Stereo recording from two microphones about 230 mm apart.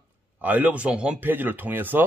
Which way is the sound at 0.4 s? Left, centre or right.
Centre.